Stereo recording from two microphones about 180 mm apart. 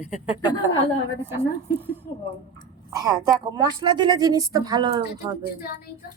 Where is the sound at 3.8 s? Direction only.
25° right (ahead or behind).